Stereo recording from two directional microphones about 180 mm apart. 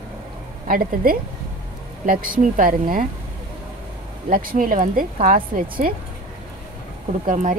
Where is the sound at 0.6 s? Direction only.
55° right (ahead or behind).